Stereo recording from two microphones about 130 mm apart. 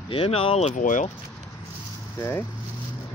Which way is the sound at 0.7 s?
80° left.